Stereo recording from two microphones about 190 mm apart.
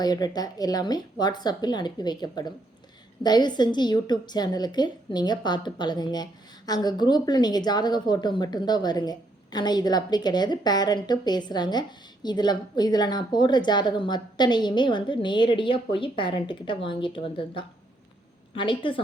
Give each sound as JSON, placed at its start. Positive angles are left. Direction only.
{"t": 0.0, "sound": "a woman's voice", "side_deg": 20}